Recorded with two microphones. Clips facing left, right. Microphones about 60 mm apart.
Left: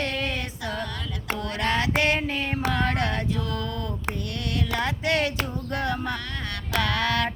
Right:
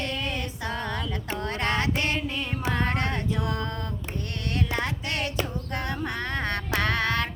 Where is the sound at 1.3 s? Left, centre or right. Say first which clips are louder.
Left 2 dB; right.